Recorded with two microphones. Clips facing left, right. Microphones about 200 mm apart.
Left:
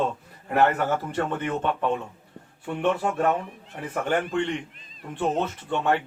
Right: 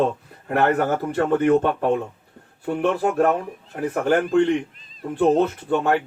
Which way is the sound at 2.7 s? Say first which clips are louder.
Right 6 dB; 40° right (ahead or behind).